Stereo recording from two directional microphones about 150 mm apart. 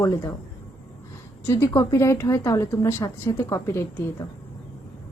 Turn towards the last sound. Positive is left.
turn(degrees=20)  # may be behind; listen again after turning